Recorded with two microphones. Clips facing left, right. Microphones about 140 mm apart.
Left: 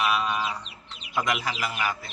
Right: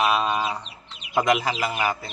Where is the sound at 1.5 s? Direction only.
40° right (ahead or behind).